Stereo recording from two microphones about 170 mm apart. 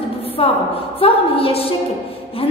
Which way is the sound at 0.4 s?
35° left (ahead or behind).